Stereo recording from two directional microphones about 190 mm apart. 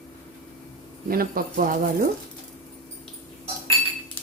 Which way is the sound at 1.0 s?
50° right (ahead or behind).